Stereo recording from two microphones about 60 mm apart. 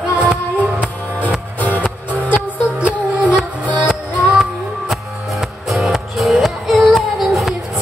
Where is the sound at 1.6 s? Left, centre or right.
Left.